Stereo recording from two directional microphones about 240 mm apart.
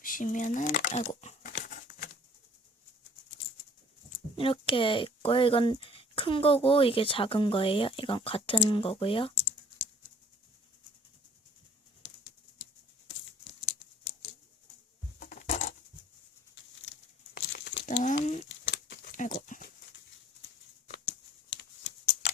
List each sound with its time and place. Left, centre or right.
0.0 s speech: left
0.9 s crumpling: left
4.4 s speech: left
15.2 s patter: left
17.3 s crumpling: left
17.8 s a sound: left
18.4 s a sound: left
19.1 s horse: left
20.9 s a sound: left